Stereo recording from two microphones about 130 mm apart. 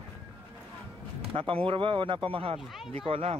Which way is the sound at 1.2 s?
45° right (ahead or behind).